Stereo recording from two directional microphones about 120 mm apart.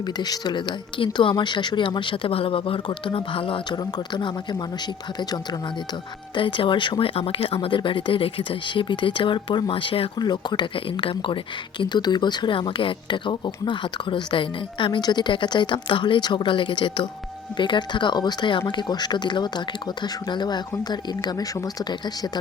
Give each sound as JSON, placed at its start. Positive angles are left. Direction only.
{"t": 0.2, "sound": "speech", "side_deg": 35}
{"t": 6.3, "sound": "speech", "side_deg": 45}